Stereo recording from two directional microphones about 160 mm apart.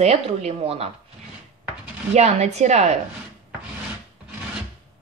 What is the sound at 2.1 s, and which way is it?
Speech, 45° right (ahead or behind).